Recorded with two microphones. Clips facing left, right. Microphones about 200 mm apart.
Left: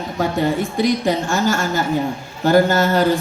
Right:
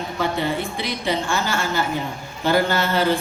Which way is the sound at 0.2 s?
45° left (ahead or behind).